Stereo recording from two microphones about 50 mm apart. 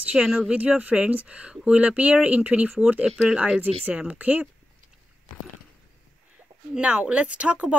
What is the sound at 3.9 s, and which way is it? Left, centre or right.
Speech, right.